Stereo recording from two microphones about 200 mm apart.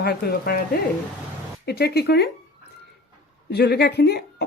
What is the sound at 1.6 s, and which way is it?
Speech, 50° left (ahead or behind).